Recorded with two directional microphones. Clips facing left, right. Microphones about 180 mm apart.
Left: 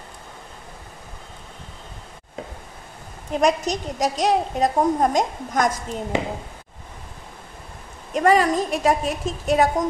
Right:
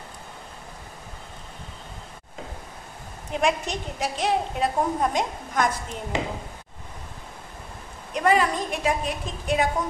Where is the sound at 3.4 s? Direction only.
40° left (ahead or behind).